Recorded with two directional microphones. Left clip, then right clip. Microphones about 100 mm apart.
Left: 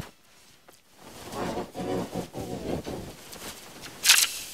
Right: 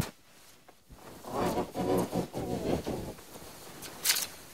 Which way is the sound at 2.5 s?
20° right (ahead or behind).